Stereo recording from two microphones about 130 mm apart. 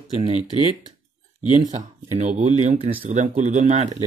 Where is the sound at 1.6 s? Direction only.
70° right (ahead or behind).